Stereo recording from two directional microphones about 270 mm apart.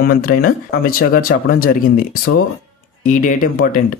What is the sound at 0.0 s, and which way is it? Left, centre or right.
Speech, left.